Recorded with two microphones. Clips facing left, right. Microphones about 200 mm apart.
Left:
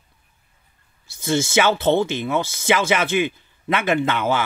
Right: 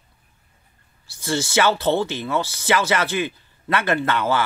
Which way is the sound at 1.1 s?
20° left (ahead or behind).